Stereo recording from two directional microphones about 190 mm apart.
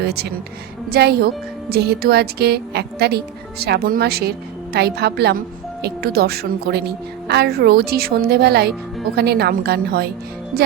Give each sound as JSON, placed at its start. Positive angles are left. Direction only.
{"t": 0.0, "sound": "a woman's voice", "side_deg": -55}